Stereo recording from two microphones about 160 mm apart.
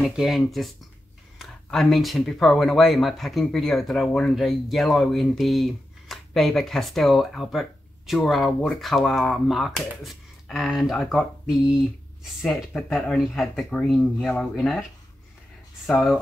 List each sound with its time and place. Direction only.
0.1 s speech: centre (ahead or behind)
15.9 s speech: centre (ahead or behind)